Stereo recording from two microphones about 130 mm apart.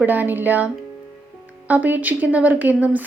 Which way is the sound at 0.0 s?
15° right (ahead or behind).